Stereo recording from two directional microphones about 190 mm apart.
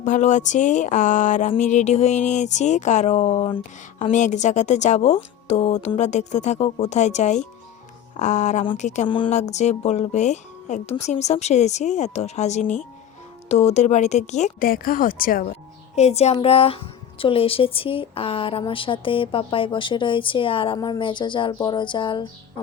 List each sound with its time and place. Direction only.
0.0 s speech: 40° left (ahead or behind)
9.0 s speech: 25° left (ahead or behind); by 15.5 s 50° left (ahead or behind)
16.0 s a woman's voice: 35° left (ahead or behind)